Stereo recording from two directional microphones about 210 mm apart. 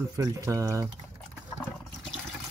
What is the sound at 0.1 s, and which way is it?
Speech, 15° right (ahead or behind).